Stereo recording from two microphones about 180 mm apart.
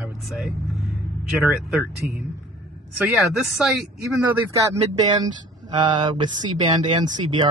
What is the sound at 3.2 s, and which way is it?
Speech, 5° right (ahead or behind).